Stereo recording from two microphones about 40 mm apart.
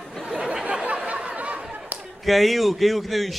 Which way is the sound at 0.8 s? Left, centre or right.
Right.